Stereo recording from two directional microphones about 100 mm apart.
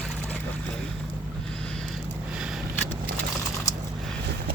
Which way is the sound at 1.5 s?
5° left (ahead or behind).